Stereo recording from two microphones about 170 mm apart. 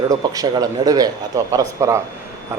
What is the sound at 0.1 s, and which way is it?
Speech, 25° right (ahead or behind).